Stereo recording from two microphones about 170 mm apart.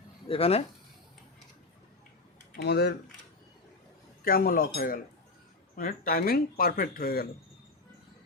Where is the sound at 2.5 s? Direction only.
70° left (ahead or behind).